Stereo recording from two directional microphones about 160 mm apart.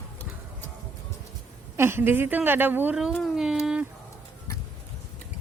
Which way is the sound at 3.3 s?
5° right (ahead or behind).